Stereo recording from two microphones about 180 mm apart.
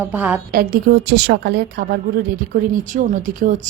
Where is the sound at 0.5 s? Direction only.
55° right (ahead or behind).